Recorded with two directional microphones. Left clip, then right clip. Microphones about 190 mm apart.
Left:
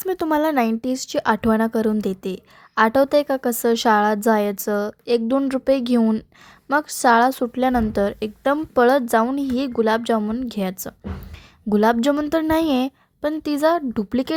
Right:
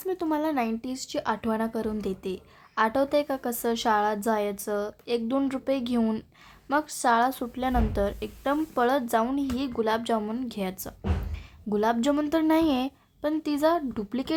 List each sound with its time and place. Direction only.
0.0 s a woman's voice: 40° left (ahead or behind)